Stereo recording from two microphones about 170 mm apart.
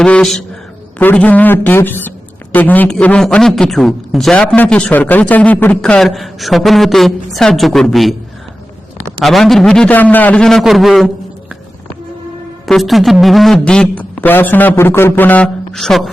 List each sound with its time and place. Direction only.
0.0 s a man's voice: 5° left (ahead or behind)
9.2 s a man's voice: centre (ahead or behind)
12.6 s a man's voice: centre (ahead or behind)